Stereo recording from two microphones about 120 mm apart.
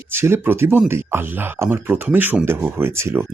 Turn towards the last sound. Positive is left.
turn(degrees=-20)  # may be behind; listen again after turning